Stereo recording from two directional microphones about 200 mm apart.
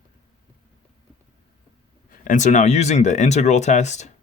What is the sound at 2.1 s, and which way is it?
Speech, 40° left (ahead or behind).